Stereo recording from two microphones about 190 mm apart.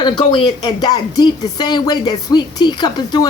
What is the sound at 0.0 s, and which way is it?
A woman's voice, 25° left (ahead or behind).